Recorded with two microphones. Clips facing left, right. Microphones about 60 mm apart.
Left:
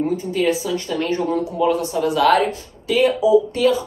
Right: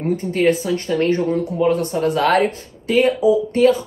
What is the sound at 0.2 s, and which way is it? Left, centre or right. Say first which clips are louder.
Speech: right 3 dB; right.